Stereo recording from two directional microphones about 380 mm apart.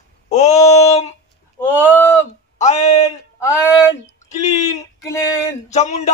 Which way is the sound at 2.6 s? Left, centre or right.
Centre.